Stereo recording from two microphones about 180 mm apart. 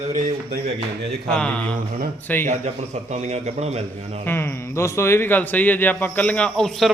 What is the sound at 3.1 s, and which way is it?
Speech, 40° right (ahead or behind).